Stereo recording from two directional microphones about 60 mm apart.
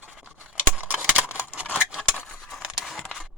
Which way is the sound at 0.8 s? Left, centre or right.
Right.